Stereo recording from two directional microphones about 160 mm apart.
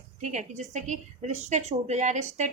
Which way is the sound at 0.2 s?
50° right (ahead or behind).